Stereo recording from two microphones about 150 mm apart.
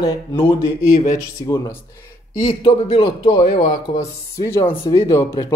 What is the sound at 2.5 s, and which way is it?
Speech, 40° left (ahead or behind).